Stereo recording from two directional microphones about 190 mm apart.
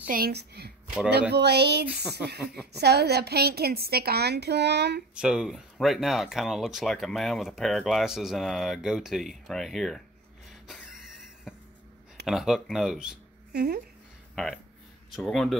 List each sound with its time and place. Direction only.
0.1 s a woman's voice: 55° right (ahead or behind)
5.1 s speech: 5° right (ahead or behind)
10.7 s a sound: centre (ahead or behind)
12.3 s speech: centre (ahead or behind)
13.5 s speech: 55° right (ahead or behind)
14.3 s speech: centre (ahead or behind)